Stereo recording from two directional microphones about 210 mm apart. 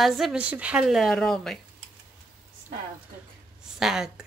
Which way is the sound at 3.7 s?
5° right (ahead or behind).